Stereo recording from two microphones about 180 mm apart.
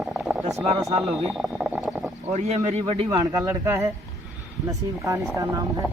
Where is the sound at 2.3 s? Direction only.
40° right (ahead or behind).